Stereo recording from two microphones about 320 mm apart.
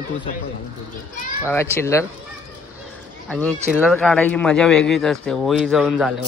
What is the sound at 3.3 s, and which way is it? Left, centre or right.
A man's voice, centre.